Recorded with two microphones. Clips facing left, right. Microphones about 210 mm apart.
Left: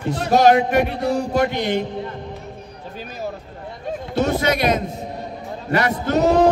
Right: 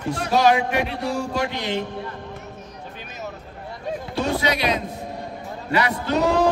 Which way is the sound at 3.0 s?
35° left (ahead or behind).